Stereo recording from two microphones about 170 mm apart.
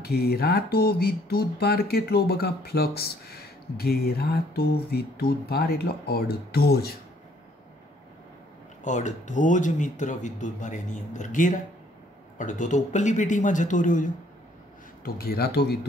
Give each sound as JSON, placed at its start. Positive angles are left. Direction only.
{"t": 0.0, "sound": "speech", "side_deg": 65}
{"t": 8.8, "sound": "speech", "side_deg": 45}
{"t": 15.0, "sound": "speech", "side_deg": 65}